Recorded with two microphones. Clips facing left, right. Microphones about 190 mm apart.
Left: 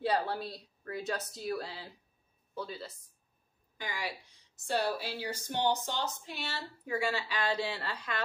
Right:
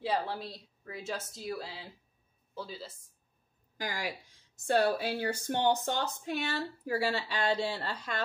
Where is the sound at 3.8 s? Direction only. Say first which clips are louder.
Right 2 dB; 40° right (ahead or behind).